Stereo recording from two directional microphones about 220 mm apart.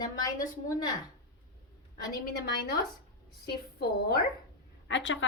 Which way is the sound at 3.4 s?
45° left (ahead or behind).